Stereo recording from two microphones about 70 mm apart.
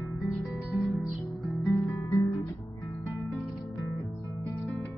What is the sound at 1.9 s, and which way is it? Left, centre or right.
Guitar, left.